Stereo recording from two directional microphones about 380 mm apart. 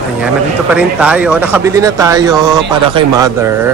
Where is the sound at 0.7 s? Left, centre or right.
Centre.